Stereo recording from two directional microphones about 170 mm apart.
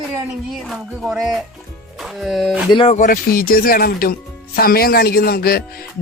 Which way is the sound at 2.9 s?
50° left (ahead or behind).